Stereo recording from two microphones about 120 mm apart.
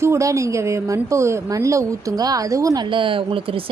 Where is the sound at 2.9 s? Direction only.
45° right (ahead or behind).